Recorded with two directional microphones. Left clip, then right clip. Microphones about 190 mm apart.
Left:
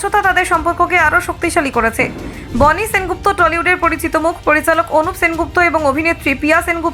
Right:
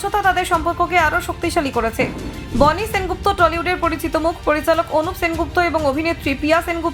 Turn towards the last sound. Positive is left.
turn(degrees=20)  # may be behind; listen again after turning